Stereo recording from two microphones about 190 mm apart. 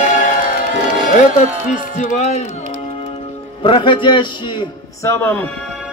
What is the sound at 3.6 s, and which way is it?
A man's voice, 25° left (ahead or behind).